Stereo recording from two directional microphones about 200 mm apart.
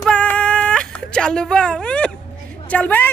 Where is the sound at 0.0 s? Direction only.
5° left (ahead or behind).